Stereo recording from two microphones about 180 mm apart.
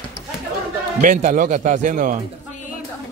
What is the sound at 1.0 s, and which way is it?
Speech, 45° right (ahead or behind).